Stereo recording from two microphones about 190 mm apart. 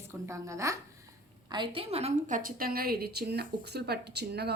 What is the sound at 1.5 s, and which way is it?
A woman's voice, 25° right (ahead or behind).